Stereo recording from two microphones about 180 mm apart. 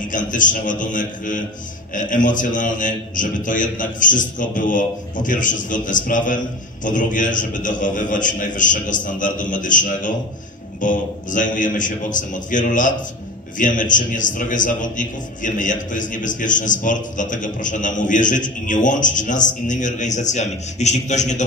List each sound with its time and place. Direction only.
0.1 s a man's voice: 45° left (ahead or behind)